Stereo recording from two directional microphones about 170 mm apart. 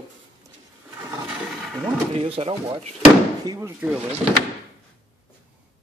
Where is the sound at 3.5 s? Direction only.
15° right (ahead or behind).